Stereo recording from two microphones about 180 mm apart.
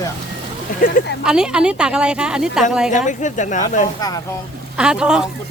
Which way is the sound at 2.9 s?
45° left (ahead or behind).